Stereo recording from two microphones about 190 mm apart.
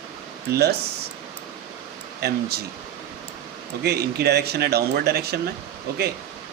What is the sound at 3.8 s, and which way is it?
Speech, 55° right (ahead or behind).